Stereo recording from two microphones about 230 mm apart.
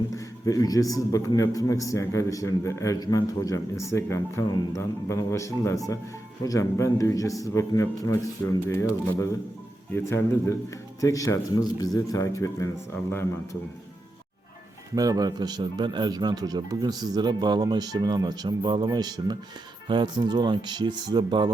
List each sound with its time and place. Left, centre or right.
0.4 s a man's voice: centre
14.9 s speech: centre